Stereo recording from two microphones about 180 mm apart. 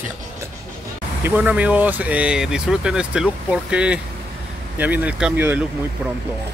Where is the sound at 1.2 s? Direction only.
10° right (ahead or behind).